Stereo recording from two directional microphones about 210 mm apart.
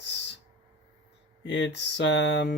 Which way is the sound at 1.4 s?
60° left (ahead or behind).